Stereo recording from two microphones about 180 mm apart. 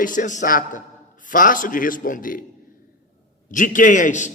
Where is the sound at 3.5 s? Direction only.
45° left (ahead or behind).